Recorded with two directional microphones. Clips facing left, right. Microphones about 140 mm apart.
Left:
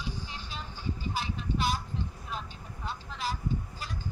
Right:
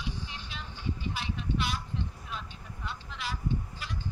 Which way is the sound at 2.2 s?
40° left (ahead or behind).